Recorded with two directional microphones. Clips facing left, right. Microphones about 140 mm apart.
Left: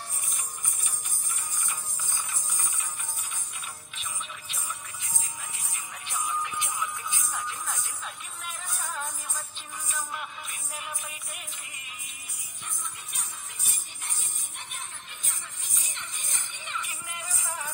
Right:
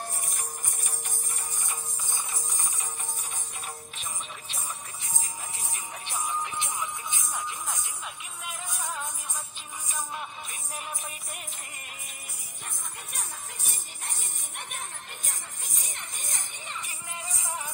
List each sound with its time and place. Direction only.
1.7 s music: 25° right (ahead or behind)
6.0 s music: 30° right (ahead or behind)
9.8 s music: 20° right (ahead or behind)
15.8 s music: 45° right (ahead or behind); by 17.7 s 20° right (ahead or behind)